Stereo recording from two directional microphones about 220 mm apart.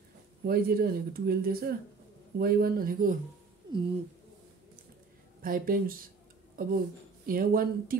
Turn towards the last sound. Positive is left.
turn(degrees=-40)  # may be behind; listen again after turning